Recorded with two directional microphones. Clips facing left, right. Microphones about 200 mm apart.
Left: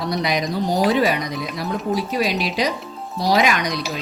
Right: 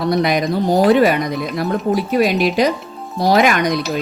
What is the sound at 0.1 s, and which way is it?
Speech, 55° right (ahead or behind).